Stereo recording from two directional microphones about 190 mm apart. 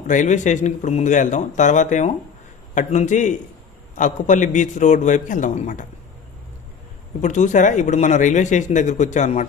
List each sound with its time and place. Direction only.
0.0 s a man's voice: 40° left (ahead or behind)
7.2 s a man's voice: 40° left (ahead or behind)